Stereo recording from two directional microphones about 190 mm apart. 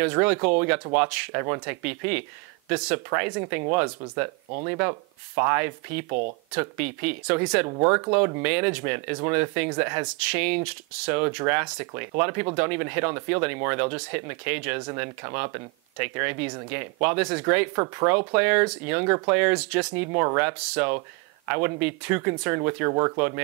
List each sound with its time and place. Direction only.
0.0 s speech: 10° right (ahead or behind)
6.0 s speech: 35° right (ahead or behind)
6.5 s speech: 10° right (ahead or behind)